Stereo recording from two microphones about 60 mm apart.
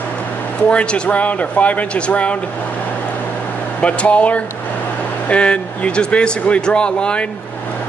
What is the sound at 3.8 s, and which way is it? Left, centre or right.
Speech, left.